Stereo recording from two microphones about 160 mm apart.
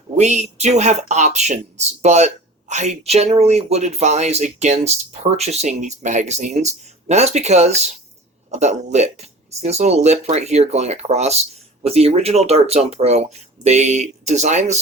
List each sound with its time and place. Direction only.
0.2 s speech: 45° right (ahead or behind)